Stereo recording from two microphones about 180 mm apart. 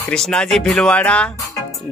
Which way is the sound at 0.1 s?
5° left (ahead or behind).